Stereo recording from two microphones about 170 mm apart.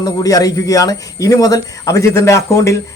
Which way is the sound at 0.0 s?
20° left (ahead or behind).